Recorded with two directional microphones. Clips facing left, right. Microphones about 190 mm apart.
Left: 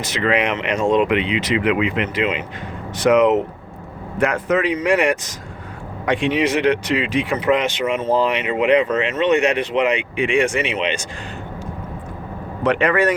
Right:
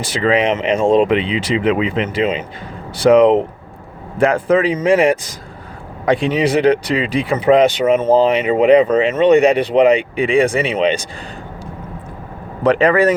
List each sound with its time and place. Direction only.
0.0 s speech: 30° right (ahead or behind)
12.6 s speech: 35° right (ahead or behind)